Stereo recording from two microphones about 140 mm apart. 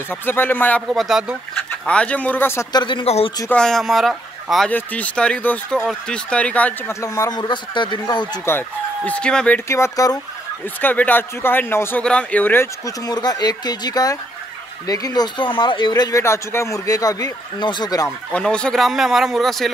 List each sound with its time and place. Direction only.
0.1 s speech: 15° left (ahead or behind)
0.8 s speech: centre (ahead or behind)
1.9 s speech: 10° left (ahead or behind)
2.7 s speech: 35° left (ahead or behind)
3.4 s speech: 5° left (ahead or behind)
4.6 s speech: 10° left (ahead or behind)
6.9 s speech: 20° left (ahead or behind)
8.5 s speech: 15° left (ahead or behind)
9.7 s speech: 20° left (ahead or behind)
13.0 s speech: 30° left (ahead or behind)
18.3 s speech: 5° left (ahead or behind)